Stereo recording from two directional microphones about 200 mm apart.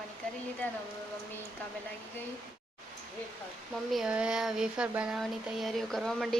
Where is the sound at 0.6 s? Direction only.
10° left (ahead or behind).